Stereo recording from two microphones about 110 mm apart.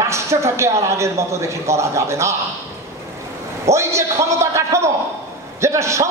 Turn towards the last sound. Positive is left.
turn(degrees=-25)  # may be behind; listen again after turning